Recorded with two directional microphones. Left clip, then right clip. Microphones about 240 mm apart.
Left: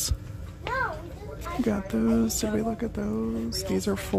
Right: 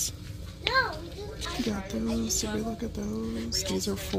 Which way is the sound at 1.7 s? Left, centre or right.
Centre.